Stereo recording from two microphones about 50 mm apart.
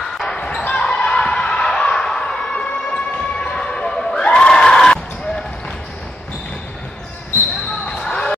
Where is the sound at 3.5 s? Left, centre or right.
Centre.